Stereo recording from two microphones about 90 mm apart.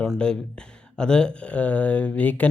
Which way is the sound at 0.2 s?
10° left (ahead or behind).